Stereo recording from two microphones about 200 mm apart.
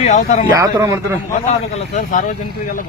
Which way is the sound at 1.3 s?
35° left (ahead or behind).